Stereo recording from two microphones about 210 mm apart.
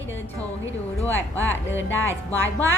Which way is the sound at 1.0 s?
10° left (ahead or behind).